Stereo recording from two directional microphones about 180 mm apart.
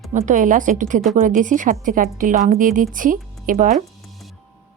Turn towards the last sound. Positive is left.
turn(degrees=-45)  # may be behind; listen again after turning